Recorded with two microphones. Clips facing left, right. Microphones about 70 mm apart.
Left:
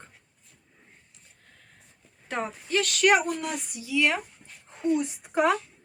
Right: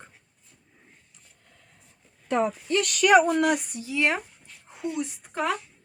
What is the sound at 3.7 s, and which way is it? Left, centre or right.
Speech, right.